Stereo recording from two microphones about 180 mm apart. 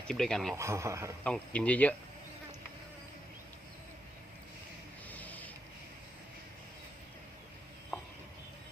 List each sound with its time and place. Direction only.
0.1 s speech: centre (ahead or behind)
0.5 s a man's voice: 15° right (ahead or behind)
1.2 s speech: 5° left (ahead or behind)
5.0 s a sound: 10° left (ahead or behind)